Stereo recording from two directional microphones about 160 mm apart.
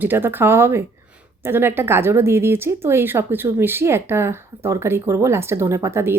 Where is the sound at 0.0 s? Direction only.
15° right (ahead or behind).